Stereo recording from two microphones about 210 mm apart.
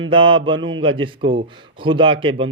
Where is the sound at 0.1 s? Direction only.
25° right (ahead or behind).